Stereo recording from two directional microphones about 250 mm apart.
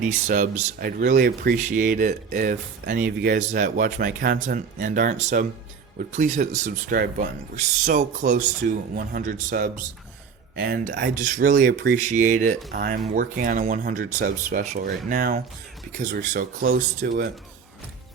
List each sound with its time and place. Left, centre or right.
0.0 s speech: right